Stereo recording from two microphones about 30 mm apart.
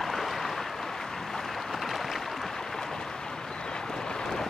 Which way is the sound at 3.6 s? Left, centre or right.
Left.